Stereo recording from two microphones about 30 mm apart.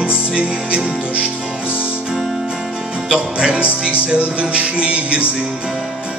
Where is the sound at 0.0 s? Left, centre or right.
Right.